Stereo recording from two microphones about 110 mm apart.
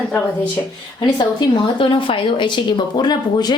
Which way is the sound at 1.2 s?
45° left (ahead or behind).